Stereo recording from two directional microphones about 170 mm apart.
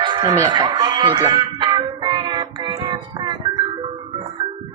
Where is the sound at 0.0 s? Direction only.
25° right (ahead or behind).